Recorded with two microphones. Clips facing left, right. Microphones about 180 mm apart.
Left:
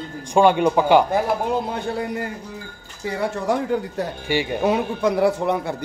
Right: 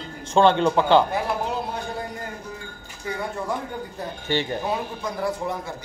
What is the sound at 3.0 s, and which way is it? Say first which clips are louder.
Speech: left 6 dB; 85° left.